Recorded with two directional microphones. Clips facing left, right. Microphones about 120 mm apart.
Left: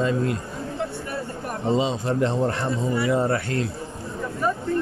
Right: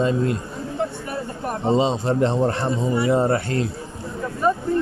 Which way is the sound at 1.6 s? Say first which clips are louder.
Right 3 dB; 30° right (ahead or behind).